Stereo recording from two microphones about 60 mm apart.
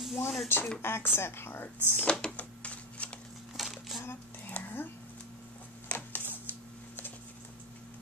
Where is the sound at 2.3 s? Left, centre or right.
Left.